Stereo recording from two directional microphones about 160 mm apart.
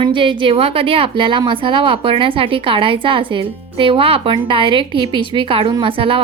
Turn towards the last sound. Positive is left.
turn(degrees=-35)  # may be behind; listen again after turning